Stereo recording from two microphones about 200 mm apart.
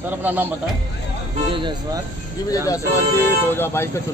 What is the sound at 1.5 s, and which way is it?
Speech, 25° right (ahead or behind).